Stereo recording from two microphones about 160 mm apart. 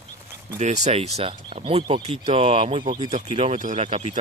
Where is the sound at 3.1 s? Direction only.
40° right (ahead or behind).